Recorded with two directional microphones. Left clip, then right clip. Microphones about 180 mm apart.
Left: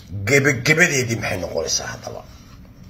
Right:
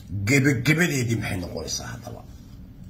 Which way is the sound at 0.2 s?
15° right (ahead or behind).